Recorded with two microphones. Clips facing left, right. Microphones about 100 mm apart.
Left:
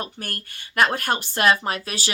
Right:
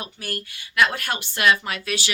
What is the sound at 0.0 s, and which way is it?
Speech, 45° left (ahead or behind).